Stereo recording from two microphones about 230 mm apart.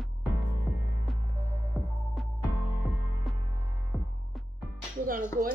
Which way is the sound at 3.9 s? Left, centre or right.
Centre.